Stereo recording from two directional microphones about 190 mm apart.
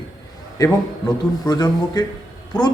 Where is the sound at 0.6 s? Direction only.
20° left (ahead or behind).